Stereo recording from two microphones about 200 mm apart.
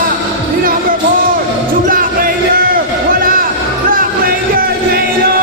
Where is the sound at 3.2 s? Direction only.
45° right (ahead or behind).